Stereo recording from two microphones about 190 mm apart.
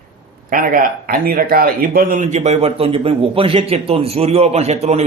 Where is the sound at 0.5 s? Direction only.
45° right (ahead or behind).